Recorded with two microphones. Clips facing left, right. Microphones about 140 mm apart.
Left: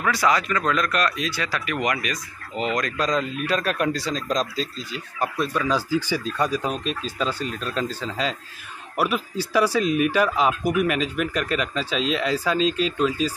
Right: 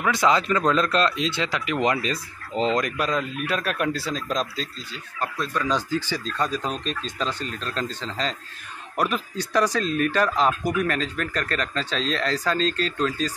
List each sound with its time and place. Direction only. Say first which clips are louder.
0.0 s speech: right 1 dB; 20° right (ahead or behind)
3.0 s speech: left 2 dB; 5° right (ahead or behind)
4.9 s speech: left 4 dB; 15° left (ahead or behind)